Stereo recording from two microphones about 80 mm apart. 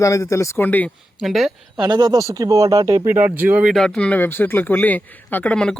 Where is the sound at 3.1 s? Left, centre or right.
Right.